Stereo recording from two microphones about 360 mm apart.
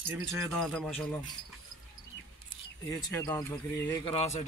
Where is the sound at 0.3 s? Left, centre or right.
Centre.